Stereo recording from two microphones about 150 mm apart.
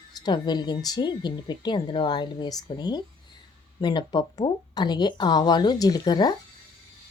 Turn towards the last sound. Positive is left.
turn(degrees=30)  # may be behind; listen again after turning